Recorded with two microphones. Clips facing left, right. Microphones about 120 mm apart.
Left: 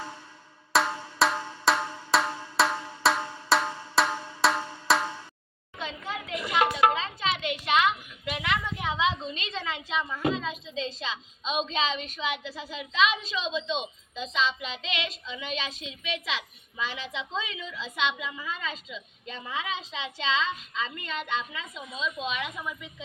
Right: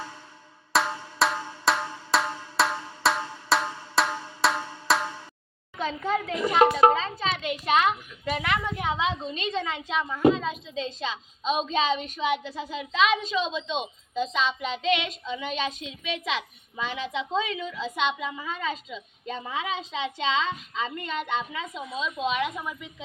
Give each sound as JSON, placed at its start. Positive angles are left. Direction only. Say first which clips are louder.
{"t": 0.7, "sound": "drum", "louder": "even", "side_deg": 0}
{"t": 5.8, "sound": "a child's voice", "louder": "right 8 dB", "side_deg": -40}